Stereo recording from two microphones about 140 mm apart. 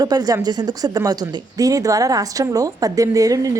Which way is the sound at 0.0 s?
25° right (ahead or behind).